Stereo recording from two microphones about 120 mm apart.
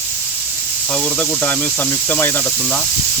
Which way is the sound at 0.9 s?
10° left (ahead or behind).